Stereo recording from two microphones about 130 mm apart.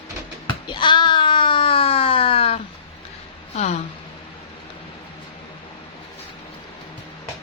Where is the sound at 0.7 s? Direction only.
35° left (ahead or behind).